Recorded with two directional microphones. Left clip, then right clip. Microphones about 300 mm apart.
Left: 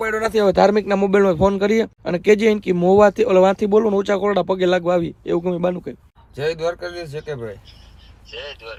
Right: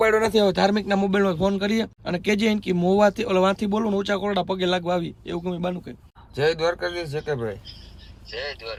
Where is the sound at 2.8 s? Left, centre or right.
Centre.